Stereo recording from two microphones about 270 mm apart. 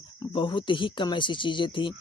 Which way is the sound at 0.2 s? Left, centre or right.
Centre.